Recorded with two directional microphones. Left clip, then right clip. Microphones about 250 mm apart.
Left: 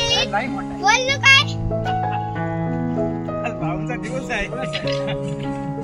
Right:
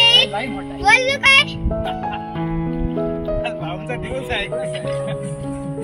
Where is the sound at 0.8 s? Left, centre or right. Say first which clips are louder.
Right 2 dB; left.